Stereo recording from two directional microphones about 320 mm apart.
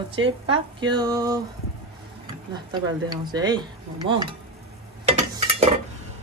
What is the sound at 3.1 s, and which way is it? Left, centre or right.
Speech, centre.